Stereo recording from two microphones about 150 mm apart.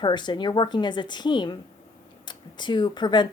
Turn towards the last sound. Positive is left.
turn(degrees=30)  # may be behind; listen again after turning